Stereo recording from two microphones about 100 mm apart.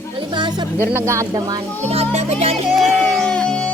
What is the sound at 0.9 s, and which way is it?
Speech, 30° right (ahead or behind).